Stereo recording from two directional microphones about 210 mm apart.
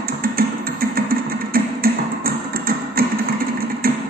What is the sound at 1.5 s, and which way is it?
Music, 45° right (ahead or behind).